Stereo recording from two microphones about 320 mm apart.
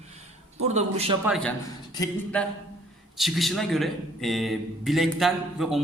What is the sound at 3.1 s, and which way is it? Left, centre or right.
A man's voice, centre.